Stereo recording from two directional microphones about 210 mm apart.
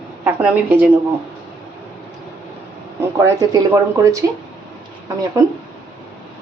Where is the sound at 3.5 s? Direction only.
15° right (ahead or behind).